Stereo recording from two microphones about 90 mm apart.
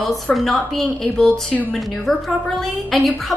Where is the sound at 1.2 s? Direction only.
15° left (ahead or behind).